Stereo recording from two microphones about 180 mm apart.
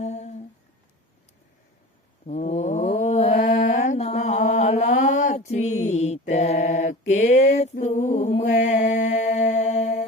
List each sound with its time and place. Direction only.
0.0 s humming: 40° left (ahead or behind)
2.2 s mantra: 40° left (ahead or behind)
7.5 s music: 40° left (ahead or behind)